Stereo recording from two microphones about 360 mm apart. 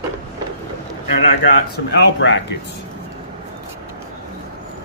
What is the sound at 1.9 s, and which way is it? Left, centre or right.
Speech, left.